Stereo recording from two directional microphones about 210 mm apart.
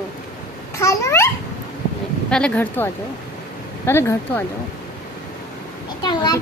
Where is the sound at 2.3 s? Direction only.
5° left (ahead or behind).